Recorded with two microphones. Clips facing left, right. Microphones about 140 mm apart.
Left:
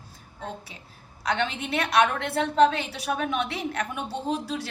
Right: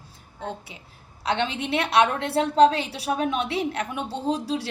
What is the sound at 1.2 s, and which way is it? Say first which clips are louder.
A woman's voice: right 2 dB; 30° right (ahead or behind).